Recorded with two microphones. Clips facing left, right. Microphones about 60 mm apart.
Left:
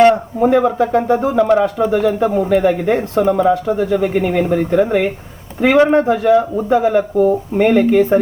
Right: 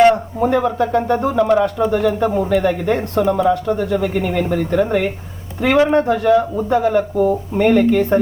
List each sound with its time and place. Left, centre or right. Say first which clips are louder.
0.4 s speech: left 3 dB; centre